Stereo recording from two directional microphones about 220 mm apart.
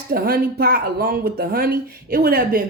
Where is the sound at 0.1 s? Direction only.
40° right (ahead or behind).